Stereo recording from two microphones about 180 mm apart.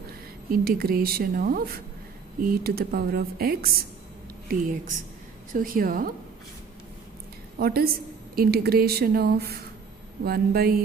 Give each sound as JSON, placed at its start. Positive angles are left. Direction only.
{"t": 0.0, "sound": "a woman's voice", "side_deg": -55}
{"t": 7.5, "sound": "a woman's voice", "side_deg": -60}